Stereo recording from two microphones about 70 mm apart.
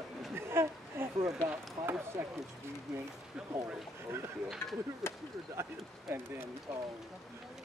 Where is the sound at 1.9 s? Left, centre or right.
Right.